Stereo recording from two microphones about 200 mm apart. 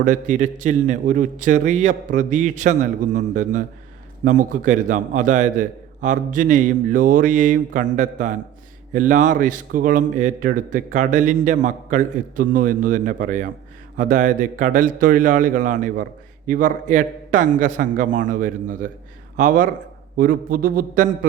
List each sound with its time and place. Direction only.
0.0 s a man's voice: 40° right (ahead or behind)